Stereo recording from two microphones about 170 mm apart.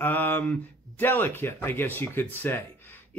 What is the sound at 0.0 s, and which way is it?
Speech, 10° left (ahead or behind).